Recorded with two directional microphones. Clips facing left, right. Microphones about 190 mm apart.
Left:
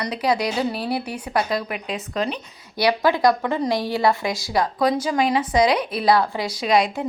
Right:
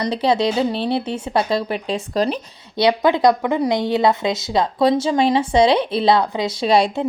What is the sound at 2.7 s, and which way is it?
A woman's voice, 20° right (ahead or behind).